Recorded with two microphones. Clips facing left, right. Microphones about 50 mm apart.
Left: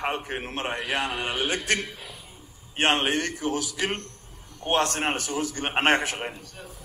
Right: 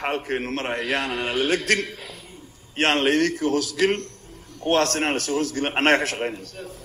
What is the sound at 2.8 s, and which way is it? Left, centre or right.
A man's voice, right.